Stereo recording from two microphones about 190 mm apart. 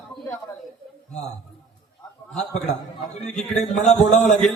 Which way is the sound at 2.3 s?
5° left (ahead or behind).